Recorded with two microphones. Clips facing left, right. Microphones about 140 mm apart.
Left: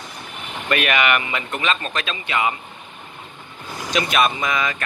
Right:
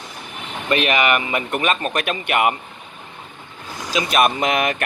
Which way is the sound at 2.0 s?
55° right (ahead or behind).